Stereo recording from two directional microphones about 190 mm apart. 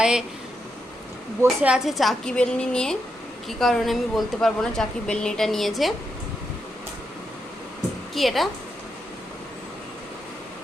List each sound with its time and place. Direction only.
0.0 s speech: 5° right (ahead or behind)
1.5 s a woman's voice: 5° right (ahead or behind)
8.1 s a woman's voice: centre (ahead or behind)